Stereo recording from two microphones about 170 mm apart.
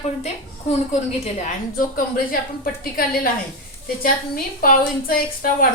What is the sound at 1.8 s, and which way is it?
A woman's voice, 55° left (ahead or behind).